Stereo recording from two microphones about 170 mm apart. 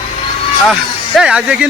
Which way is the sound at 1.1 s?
5° right (ahead or behind).